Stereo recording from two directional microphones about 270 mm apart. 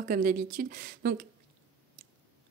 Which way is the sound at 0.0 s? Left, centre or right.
Right.